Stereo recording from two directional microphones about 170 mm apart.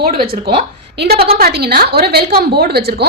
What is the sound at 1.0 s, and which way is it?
A woman's voice, 70° right (ahead or behind).